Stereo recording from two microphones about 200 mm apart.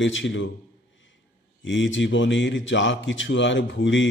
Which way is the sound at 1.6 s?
70° left (ahead or behind).